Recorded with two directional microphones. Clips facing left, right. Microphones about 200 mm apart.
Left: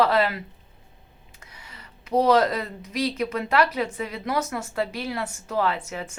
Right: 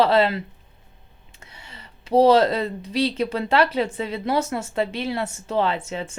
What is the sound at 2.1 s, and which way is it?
Speech, 30° right (ahead or behind).